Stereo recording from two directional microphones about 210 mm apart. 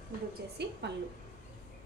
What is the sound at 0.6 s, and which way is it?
Speech, 50° right (ahead or behind).